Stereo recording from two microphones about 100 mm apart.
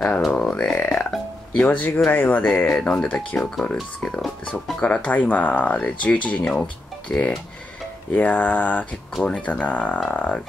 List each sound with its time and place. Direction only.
0.2 s a sound: 5° left (ahead or behind)
1.6 s speech: 15° left (ahead or behind)
8.1 s speech: 20° left (ahead or behind)